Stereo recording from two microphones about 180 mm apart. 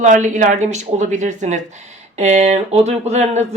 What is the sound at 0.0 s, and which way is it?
Speech, 45° right (ahead or behind).